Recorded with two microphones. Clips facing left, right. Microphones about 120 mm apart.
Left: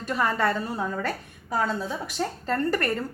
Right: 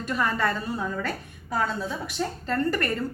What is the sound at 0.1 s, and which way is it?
A woman's voice, 30° left (ahead or behind).